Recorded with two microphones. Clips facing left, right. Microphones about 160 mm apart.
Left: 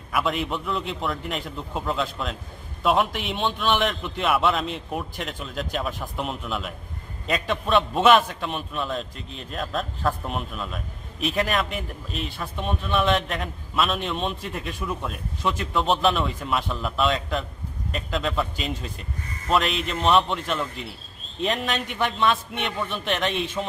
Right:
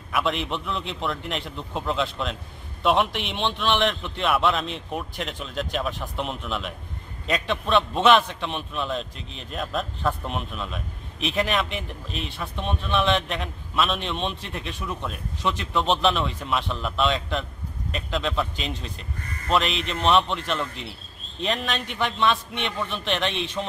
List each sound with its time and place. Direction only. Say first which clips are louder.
0.1 s a man's voice: even; centre (ahead or behind)
9.1 s speech: left 2 dB; 45° left (ahead or behind)
9.5 s a man's voice: even; centre (ahead or behind)